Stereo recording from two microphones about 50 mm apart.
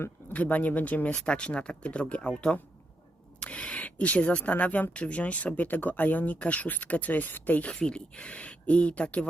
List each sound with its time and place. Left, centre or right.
0.3 s speech: left
1.1 s speech: left
3.4 s speech: left
7.7 s speech: left